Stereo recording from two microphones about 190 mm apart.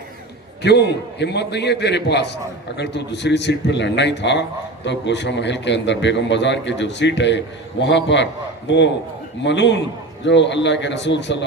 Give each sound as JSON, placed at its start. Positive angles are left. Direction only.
{"t": 0.6, "sound": "a man's voice", "side_deg": 60}
{"t": 9.4, "sound": "a man's voice", "side_deg": 70}